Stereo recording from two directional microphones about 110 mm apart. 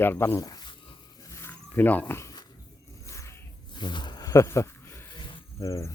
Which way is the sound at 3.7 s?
40° left (ahead or behind).